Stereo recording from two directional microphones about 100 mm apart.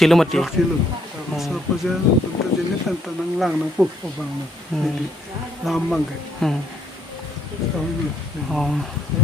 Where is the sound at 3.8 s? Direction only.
15° right (ahead or behind).